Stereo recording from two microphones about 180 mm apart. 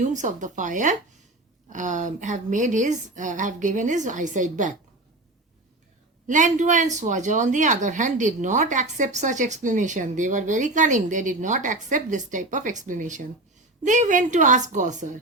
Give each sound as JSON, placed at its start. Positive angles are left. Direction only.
{"t": 0.0, "sound": "a woman's voice", "side_deg": -45}
{"t": 6.2, "sound": "a woman's voice", "side_deg": -45}